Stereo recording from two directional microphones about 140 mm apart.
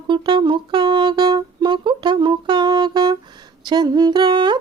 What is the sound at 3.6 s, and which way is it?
Music, 30° right (ahead or behind).